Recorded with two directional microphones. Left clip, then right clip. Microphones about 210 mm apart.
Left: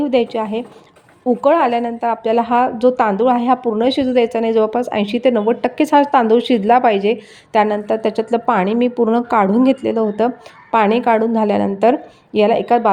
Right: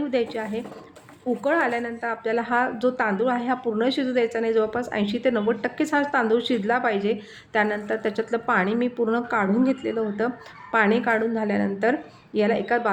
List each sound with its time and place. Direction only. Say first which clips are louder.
0.1 s a woman's voice: left 9 dB; 25° left (ahead or behind)